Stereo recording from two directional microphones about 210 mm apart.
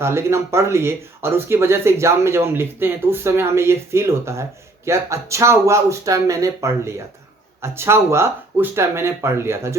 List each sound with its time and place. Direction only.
0.0 s speech: 10° right (ahead or behind)